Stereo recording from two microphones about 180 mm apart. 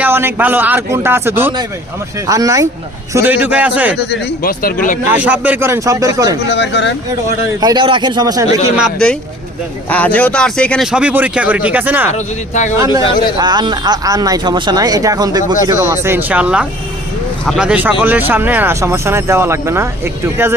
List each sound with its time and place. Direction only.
0.0 s speech: 10° right (ahead or behind)
3.9 s a man's voice: 60° left (ahead or behind)
5.1 s speech: 10° right (ahead or behind)
6.5 s speech: 75° left (ahead or behind)
7.6 s speech: 25° right (ahead or behind)
8.7 s speech: 5° right (ahead or behind)
9.9 s speech: 10° left (ahead or behind)
10.9 s speech: 5° right (ahead or behind)
12.1 s speech: 40° left (ahead or behind)
13.4 s speech: 25° right (ahead or behind)